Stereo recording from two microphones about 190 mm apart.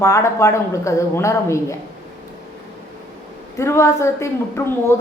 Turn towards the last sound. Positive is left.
turn(degrees=15)  # may be behind; listen again after turning